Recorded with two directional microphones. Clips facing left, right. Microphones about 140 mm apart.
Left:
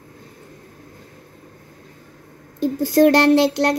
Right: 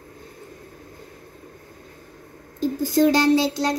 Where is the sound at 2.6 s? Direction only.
70° left (ahead or behind).